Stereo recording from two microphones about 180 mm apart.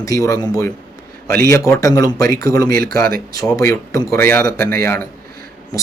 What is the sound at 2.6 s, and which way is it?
Speech, 55° right (ahead or behind).